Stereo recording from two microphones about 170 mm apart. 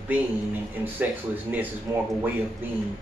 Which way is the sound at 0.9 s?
10° right (ahead or behind).